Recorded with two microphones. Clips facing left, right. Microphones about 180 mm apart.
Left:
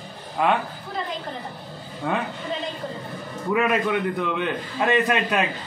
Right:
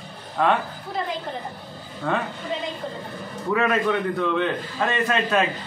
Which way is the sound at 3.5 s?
15° left (ahead or behind).